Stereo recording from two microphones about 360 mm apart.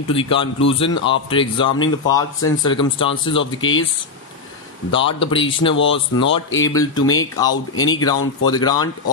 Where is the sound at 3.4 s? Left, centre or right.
Left.